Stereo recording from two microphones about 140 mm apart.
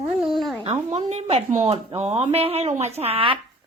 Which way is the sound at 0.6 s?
45° right (ahead or behind).